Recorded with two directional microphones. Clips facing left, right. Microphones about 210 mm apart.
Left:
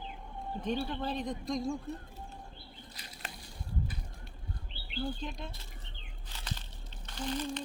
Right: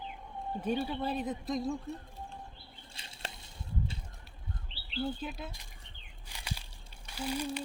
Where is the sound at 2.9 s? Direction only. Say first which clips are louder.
Right 4 dB; 25° right (ahead or behind).